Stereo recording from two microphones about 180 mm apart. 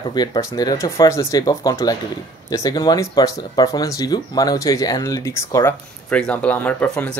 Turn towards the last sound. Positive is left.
turn(degrees=10)  # may be behind; listen again after turning